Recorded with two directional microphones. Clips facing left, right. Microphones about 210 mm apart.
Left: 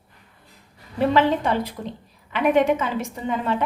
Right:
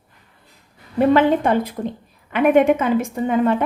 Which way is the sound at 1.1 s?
50° right (ahead or behind).